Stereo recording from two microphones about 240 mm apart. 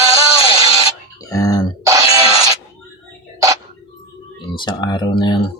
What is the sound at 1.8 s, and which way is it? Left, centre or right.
Music, centre.